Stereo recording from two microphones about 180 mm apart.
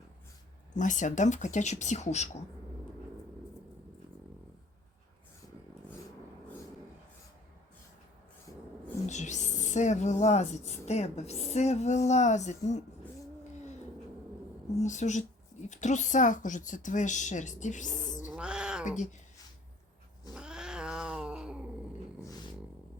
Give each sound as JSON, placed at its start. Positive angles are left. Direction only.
{"t": 0.7, "sound": "speech", "side_deg": 45}
{"t": 9.0, "sound": "speech", "side_deg": 40}
{"t": 14.8, "sound": "a woman's voice", "side_deg": 40}
{"t": 18.3, "sound": "cat", "side_deg": -5}
{"t": 20.3, "sound": "cat", "side_deg": -5}